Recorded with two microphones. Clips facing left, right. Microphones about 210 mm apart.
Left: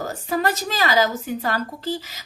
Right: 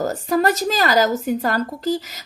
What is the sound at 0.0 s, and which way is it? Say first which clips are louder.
Speech: right 5 dB; 45° right (ahead or behind).